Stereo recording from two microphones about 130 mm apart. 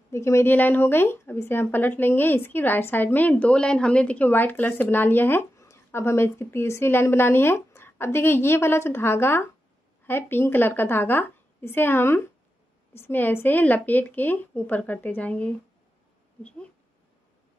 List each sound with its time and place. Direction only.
0.1 s a woman's voice: 20° left (ahead or behind)